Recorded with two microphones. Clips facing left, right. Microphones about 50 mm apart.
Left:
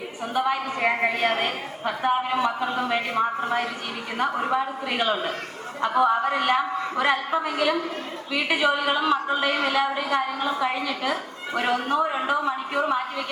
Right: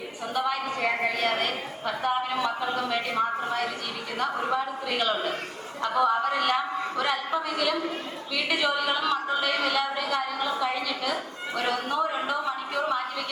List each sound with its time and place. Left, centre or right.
0.3 s a woman's voice: left